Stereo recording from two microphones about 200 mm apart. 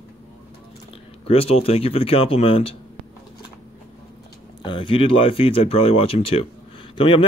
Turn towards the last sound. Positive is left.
turn(degrees=25)  # may be behind; listen again after turning